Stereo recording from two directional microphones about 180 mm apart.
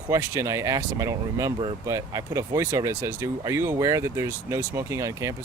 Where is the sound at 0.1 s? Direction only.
15° right (ahead or behind).